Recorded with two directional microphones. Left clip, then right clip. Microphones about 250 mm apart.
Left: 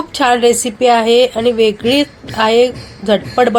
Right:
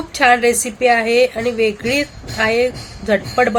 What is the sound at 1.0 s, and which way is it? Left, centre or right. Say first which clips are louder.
A woman's voice: left 4 dB; centre.